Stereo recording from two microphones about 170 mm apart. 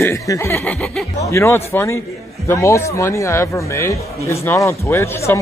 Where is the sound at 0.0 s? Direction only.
15° left (ahead or behind).